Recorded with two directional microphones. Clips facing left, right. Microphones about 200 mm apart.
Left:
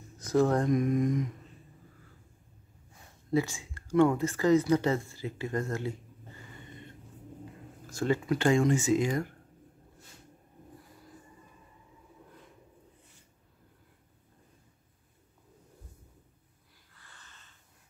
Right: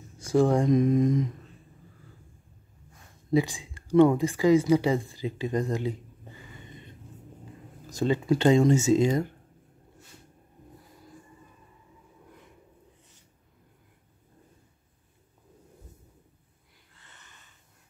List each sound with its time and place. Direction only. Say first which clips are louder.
0.3 s speech: right 3 dB; 15° right (ahead or behind)
3.3 s speech: right 4 dB; 15° right (ahead or behind)
7.9 s speech: right 4 dB; 20° right (ahead or behind)
16.9 s wheeze: right 1 dB; 20° right (ahead or behind)